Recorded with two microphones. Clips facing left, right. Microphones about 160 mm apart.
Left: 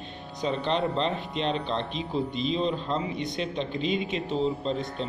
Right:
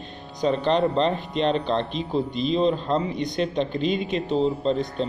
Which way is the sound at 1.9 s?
Centre (ahead or behind).